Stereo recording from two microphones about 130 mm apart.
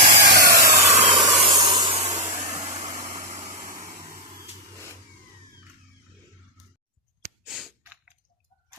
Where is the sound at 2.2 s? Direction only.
40° right (ahead or behind).